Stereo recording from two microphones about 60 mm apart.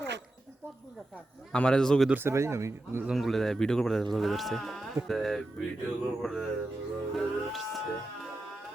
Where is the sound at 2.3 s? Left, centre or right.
Right.